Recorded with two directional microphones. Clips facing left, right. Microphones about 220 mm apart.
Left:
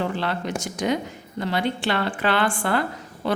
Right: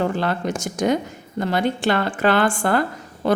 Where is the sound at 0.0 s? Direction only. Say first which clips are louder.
Right 4 dB; 45° right (ahead or behind).